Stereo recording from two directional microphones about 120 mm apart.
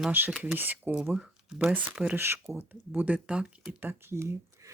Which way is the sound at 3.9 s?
20° right (ahead or behind).